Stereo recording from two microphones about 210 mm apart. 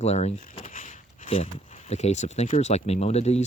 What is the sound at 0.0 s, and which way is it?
Speech, 30° left (ahead or behind).